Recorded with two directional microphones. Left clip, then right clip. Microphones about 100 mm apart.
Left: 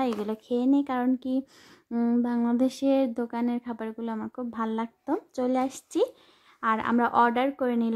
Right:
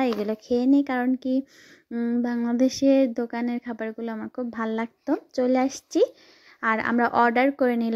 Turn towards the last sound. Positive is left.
turn(degrees=-35)  # may be behind; listen again after turning